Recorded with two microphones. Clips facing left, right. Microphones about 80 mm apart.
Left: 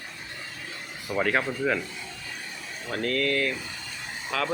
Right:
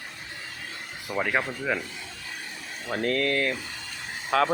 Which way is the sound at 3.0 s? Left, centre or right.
Right.